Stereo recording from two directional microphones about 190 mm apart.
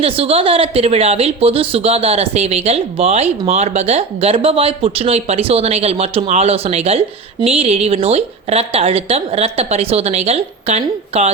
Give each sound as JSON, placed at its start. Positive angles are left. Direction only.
{"t": 0.0, "sound": "speech", "side_deg": -30}